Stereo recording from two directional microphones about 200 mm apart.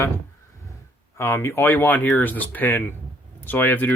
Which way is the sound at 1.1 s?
15° left (ahead or behind).